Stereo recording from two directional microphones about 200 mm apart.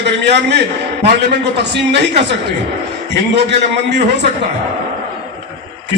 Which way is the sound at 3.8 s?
60° right (ahead or behind).